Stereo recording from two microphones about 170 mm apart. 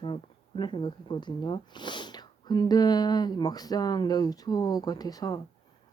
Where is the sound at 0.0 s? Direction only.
30° left (ahead or behind).